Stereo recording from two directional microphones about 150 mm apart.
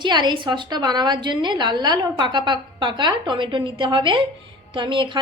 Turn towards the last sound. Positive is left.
turn(degrees=-35)  # may be behind; listen again after turning